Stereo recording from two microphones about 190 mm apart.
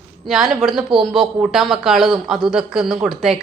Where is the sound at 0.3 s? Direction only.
Centre (ahead or behind).